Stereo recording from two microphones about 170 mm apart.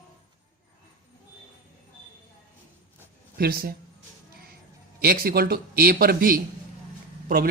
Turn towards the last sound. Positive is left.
turn(degrees=-60)  # may be behind; listen again after turning